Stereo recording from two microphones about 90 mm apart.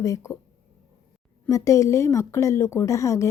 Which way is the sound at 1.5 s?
35° left (ahead or behind).